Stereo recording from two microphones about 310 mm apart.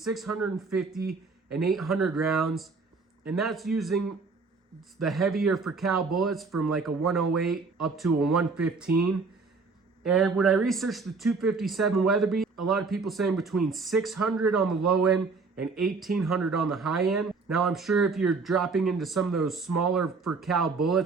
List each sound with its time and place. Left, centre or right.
0.0 s speech: centre
0.3 s speech: right
0.7 s speech: centre
5.0 s speech: centre
10.0 s speech: centre